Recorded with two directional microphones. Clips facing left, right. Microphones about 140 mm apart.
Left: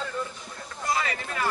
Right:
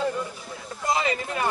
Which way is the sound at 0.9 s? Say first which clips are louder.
Right 4 dB; 20° right (ahead or behind).